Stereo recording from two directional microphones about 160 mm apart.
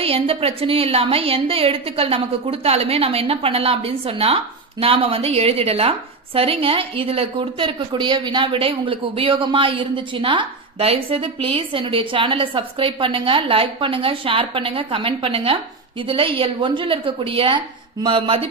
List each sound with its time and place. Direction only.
0.0 s a woman's voice: 35° right (ahead or behind)